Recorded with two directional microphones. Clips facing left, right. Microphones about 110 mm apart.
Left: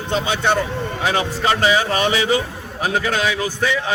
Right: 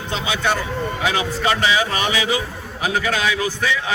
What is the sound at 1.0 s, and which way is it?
A man's voice, 35° left (ahead or behind).